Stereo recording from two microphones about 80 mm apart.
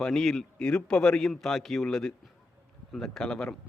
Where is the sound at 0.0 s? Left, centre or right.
Centre.